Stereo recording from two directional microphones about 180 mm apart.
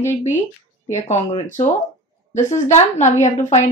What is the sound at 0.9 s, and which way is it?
A woman's voice, 40° left (ahead or behind).